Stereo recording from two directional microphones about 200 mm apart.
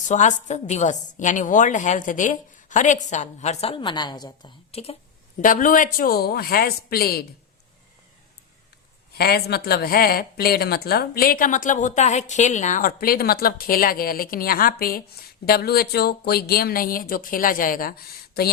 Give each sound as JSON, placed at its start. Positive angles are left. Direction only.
{"t": 0.1, "sound": "a woman's voice", "side_deg": 35}
{"t": 5.4, "sound": "speech", "side_deg": 40}
{"t": 9.1, "sound": "speech", "side_deg": 50}